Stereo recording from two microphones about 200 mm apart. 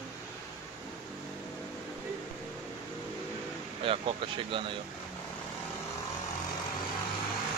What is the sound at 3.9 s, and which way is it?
Speech, 25° right (ahead or behind).